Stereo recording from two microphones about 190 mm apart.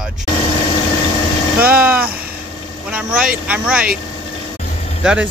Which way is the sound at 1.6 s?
10° right (ahead or behind).